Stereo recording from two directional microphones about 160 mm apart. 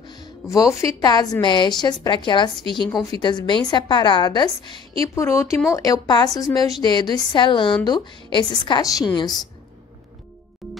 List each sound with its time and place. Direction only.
0.0 s a woman's voice: 25° left (ahead or behind)
10.6 s music: centre (ahead or behind)